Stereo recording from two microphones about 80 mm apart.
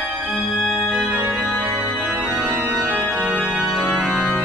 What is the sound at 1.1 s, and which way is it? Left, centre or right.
Organ, centre.